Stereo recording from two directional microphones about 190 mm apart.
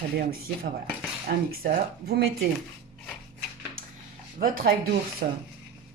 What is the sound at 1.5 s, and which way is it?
Speech, 50° right (ahead or behind).